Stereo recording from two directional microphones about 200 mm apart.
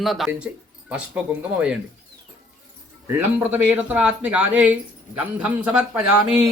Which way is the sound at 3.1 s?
10° right (ahead or behind).